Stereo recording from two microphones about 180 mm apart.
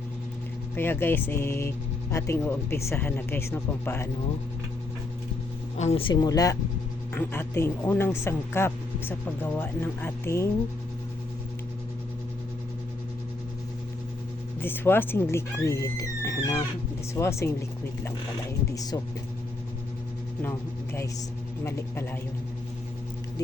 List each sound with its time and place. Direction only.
0.8 s speech: 10° left (ahead or behind)
5.7 s speech: 35° left (ahead or behind); by 10.5 s 15° left (ahead or behind)
14.6 s speech: 10° left (ahead or behind)
18.7 s speech: 20° left (ahead or behind)
20.4 s speech: 15° left (ahead or behind)